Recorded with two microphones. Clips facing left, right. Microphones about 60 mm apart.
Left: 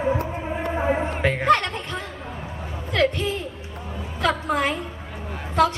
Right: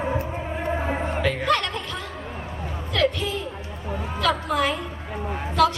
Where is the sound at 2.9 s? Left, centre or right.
Left.